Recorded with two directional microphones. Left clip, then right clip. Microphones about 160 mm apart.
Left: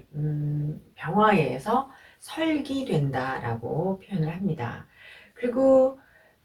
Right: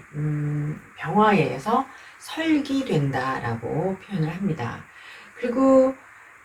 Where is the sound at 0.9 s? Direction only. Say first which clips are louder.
Right 2 dB; 10° right (ahead or behind).